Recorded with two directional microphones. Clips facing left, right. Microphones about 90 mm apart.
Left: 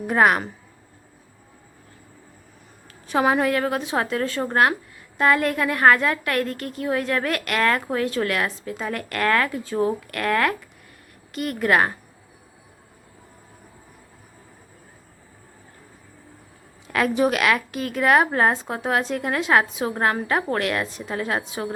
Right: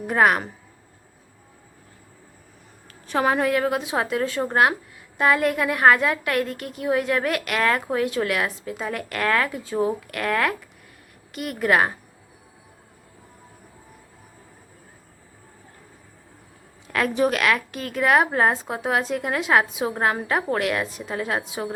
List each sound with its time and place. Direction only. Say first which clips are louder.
0.1 s a woman's voice: left 1 dB; centre (ahead or behind)
2.8 s a woman's voice: left 1 dB; 10° left (ahead or behind); by 11.9 s 5° right (ahead or behind)
16.9 s a woman's voice: left 1 dB; 5° left (ahead or behind)